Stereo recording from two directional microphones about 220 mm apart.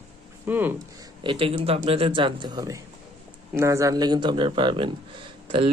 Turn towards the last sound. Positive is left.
turn(degrees=-20)  # may be behind; listen again after turning